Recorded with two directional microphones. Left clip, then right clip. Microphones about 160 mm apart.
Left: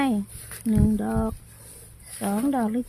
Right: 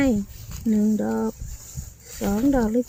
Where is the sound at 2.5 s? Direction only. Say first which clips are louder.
Right 4 dB; 15° left (ahead or behind).